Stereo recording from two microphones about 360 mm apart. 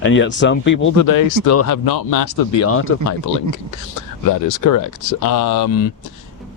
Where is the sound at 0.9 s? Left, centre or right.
Left.